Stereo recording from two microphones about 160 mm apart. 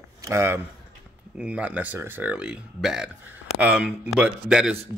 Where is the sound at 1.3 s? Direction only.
5° right (ahead or behind).